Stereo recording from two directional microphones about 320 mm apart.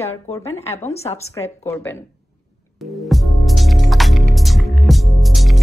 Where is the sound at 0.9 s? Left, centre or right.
Centre.